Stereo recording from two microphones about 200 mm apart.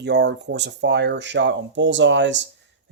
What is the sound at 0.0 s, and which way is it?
Speech, 55° right (ahead or behind).